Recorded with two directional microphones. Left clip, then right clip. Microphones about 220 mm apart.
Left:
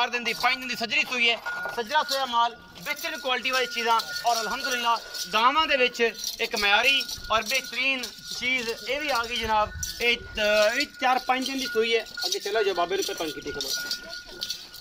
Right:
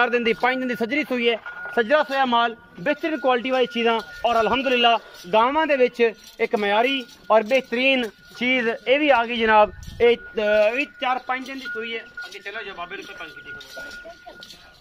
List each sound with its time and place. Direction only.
0.0 s speech: 40° right (ahead or behind); by 11.4 s centre (ahead or behind)
11.4 s speech: 15° left (ahead or behind)